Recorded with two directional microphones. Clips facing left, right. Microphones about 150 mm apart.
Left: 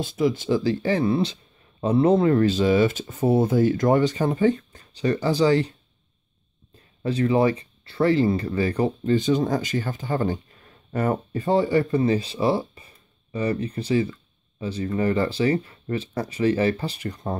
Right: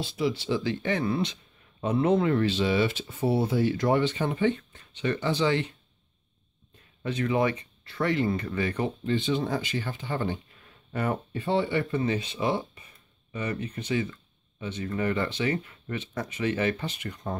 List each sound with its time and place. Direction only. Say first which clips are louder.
0.0 s speech: left 5 dB; 45° left (ahead or behind)
7.0 s speech: left 5 dB; 35° left (ahead or behind)